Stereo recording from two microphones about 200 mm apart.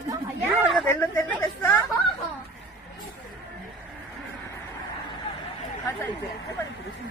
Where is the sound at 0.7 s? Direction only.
10° left (ahead or behind).